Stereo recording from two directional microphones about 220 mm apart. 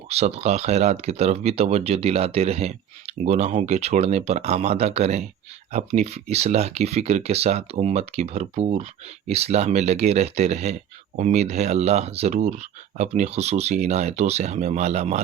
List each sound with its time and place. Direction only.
0.1 s speech: 30° right (ahead or behind)